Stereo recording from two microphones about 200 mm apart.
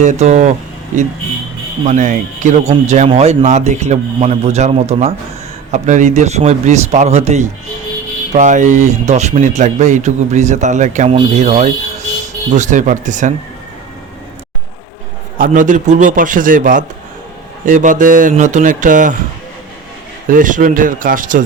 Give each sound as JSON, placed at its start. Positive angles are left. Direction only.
{"t": 0.0, "sound": "speech", "side_deg": -35}
{"t": 15.4, "sound": "speech", "side_deg": -40}
{"t": 20.2, "sound": "speech", "side_deg": -40}